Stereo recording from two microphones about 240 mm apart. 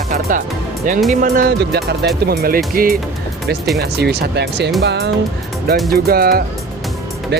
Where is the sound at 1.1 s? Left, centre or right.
Right.